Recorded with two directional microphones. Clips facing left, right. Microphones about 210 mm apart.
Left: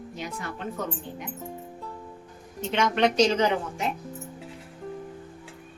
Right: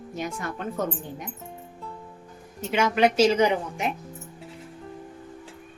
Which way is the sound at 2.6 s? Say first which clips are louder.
Right 2 dB; 5° right (ahead or behind).